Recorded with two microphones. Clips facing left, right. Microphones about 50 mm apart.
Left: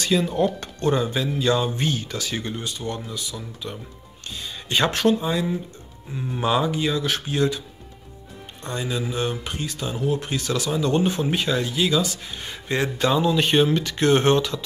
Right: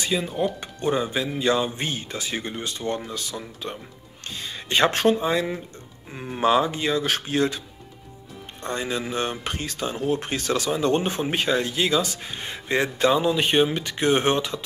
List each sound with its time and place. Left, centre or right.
0.0 s speech: centre
0.7 s speech: centre; by 5.6 s right
6.1 s speech: right
6.4 s speech: right
8.6 s speech: right